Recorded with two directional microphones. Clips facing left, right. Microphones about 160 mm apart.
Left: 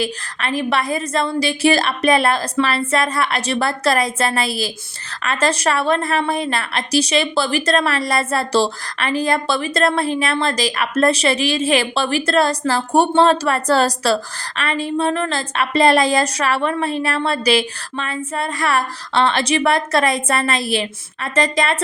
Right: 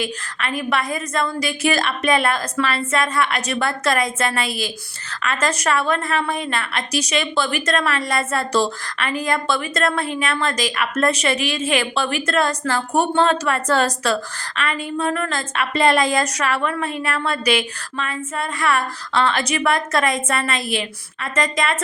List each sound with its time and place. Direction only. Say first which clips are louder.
0.0 s a woman's voice: left 3 dB; 35° left (ahead or behind)